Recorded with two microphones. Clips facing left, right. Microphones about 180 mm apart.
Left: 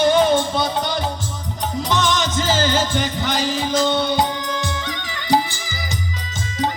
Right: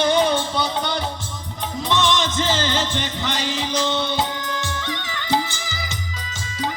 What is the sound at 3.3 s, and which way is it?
Music, 45° left (ahead or behind).